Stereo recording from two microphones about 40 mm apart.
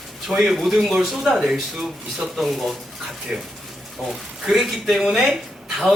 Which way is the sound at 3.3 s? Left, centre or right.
Centre.